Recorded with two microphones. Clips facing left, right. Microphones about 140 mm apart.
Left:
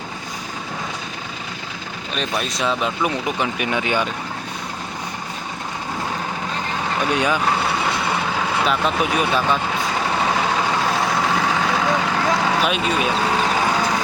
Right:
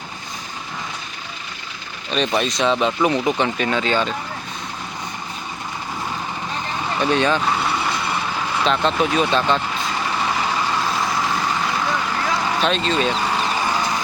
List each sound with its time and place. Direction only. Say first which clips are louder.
2.1 s speech: right 5 dB; 5° left (ahead or behind)
3.7 s speech: right 1 dB; 15° left (ahead or behind)
7.1 s speech: right 2 dB; 10° left (ahead or behind)
8.6 s speech: right 3 dB; 5° left (ahead or behind)
10.9 s vehicle: left 2 dB; 75° left (ahead or behind)
12.6 s speech: right 1 dB; 10° left (ahead or behind)
13.4 s vehicle: left 2 dB; 70° left (ahead or behind)